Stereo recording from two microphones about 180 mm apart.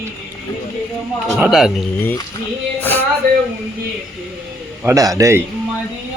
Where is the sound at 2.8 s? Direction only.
10° left (ahead or behind).